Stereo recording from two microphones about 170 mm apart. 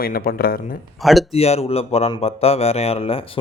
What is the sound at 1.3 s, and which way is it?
Speech, 35° left (ahead or behind).